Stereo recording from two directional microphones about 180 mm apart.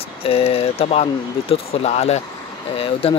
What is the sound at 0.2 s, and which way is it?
Speech, 30° left (ahead or behind).